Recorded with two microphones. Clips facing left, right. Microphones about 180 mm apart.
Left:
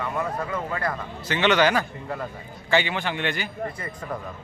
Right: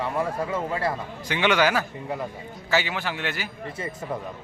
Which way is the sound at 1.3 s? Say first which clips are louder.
Left 1 dB; 10° right (ahead or behind).